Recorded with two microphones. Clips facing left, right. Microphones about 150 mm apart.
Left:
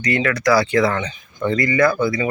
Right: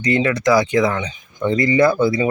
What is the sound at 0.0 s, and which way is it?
Speech, 25° right (ahead or behind).